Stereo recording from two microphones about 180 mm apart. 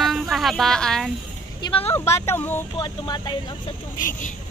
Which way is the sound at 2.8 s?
25° left (ahead or behind).